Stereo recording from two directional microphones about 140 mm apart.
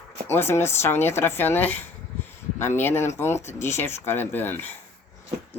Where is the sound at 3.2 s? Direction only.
20° left (ahead or behind).